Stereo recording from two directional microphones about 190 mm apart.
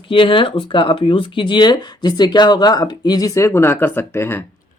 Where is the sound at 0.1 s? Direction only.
25° left (ahead or behind).